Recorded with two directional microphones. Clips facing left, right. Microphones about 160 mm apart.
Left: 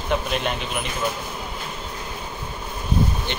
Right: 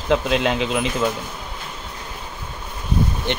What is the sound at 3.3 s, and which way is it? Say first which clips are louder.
Speech: right 6 dB; 70° right (ahead or behind).